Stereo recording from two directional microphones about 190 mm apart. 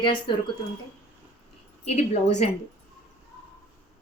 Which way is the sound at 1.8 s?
35° left (ahead or behind).